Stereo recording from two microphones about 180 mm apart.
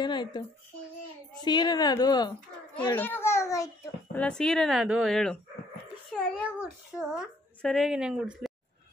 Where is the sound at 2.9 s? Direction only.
10° left (ahead or behind).